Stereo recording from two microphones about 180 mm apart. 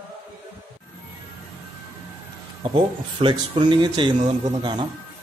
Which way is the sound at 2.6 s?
30° right (ahead or behind).